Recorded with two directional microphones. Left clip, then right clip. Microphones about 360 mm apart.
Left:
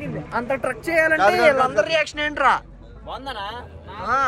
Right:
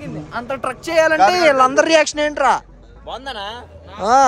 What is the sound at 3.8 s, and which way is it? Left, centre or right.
Speech, centre.